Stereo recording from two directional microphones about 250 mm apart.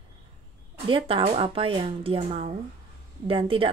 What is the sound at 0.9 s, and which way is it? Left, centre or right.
A woman's voice, right.